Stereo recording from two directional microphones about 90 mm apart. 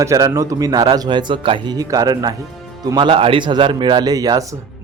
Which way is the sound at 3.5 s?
55° right (ahead or behind).